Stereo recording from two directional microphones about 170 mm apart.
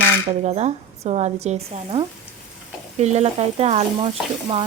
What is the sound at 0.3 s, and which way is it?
Speech, 40° right (ahead or behind).